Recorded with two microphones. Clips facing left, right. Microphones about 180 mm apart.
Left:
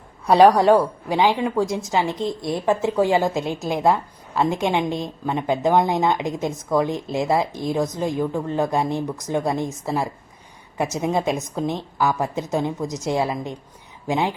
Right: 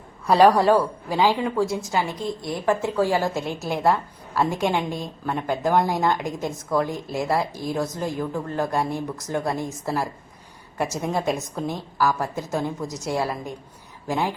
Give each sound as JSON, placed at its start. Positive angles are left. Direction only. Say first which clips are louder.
{"t": 0.4, "sound": "a woman's voice", "louder": "left 2 dB", "side_deg": 15}